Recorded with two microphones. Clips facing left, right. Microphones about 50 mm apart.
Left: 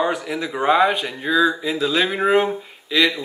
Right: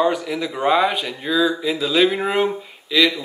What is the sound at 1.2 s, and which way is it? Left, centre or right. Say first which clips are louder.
Speech: left 1 dB; left.